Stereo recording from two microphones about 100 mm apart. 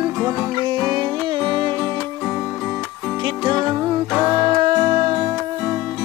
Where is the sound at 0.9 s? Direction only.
50° right (ahead or behind).